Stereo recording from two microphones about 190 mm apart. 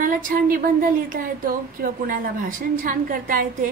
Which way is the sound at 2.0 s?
45° right (ahead or behind).